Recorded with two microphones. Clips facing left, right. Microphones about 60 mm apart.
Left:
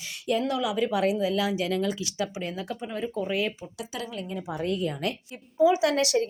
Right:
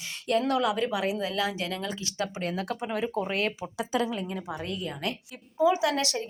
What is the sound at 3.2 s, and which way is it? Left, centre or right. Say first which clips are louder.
Speech: left 1 dB; right.